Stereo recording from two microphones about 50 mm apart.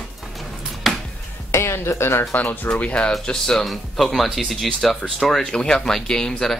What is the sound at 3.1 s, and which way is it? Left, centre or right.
Speech, centre.